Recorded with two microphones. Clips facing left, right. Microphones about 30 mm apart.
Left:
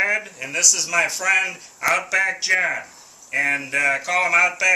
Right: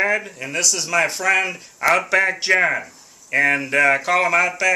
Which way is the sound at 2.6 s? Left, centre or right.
Centre.